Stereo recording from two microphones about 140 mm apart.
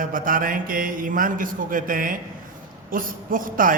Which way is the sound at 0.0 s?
80° right.